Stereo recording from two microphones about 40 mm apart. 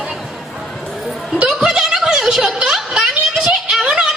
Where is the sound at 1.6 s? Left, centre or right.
Centre.